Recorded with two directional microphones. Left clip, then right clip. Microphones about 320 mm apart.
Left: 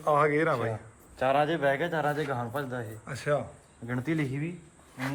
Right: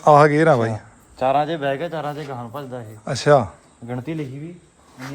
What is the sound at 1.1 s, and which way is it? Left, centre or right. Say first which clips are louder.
A man's voice: right 6 dB; right.